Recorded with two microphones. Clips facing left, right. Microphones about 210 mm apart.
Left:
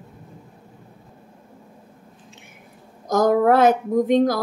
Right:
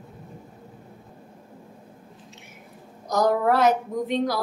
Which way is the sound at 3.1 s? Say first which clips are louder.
Left 5 dB; 50° left (ahead or behind).